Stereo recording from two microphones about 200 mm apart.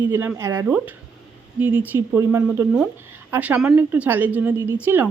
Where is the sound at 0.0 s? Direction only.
10° right (ahead or behind).